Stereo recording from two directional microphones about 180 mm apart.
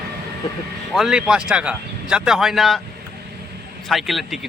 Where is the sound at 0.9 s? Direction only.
5° right (ahead or behind).